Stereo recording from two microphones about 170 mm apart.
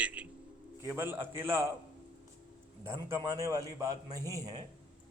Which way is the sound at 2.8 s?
15° right (ahead or behind).